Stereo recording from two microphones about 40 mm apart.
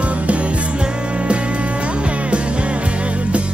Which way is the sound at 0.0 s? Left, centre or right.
Right.